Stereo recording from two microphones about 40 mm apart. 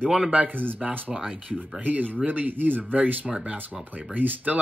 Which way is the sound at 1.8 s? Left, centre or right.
Right.